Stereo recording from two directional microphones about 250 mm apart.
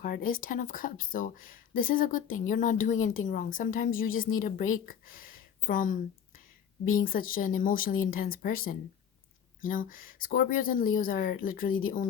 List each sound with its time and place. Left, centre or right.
0.0 s speech: left